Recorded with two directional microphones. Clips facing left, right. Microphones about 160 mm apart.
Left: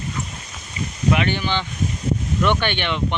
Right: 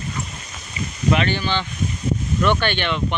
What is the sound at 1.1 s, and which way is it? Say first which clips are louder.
Speech: right 1 dB; 15° left (ahead or behind).